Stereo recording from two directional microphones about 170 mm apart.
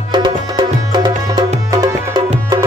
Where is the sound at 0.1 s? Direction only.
25° right (ahead or behind).